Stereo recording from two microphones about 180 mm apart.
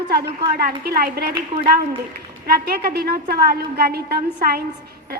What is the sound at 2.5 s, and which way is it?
A woman's voice, 60° right (ahead or behind).